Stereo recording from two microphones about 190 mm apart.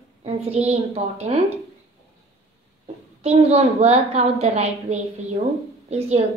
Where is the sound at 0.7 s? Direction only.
35° right (ahead or behind).